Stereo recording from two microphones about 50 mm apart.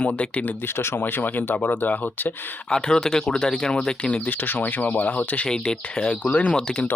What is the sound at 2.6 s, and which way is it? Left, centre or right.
Speech, centre.